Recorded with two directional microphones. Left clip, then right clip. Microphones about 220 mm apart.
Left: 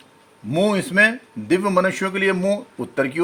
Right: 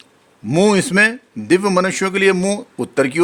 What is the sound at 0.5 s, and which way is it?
A man's voice, 50° right (ahead or behind).